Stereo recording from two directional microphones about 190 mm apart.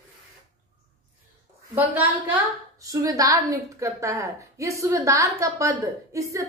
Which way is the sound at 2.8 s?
20° right (ahead or behind).